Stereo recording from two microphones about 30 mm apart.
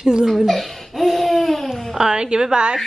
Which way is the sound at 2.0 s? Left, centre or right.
Right.